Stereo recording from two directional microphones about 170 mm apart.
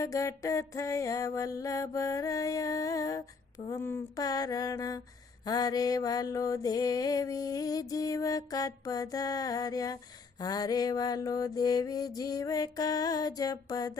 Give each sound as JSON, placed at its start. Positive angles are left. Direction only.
{"t": 0.0, "sound": "mantra", "side_deg": 20}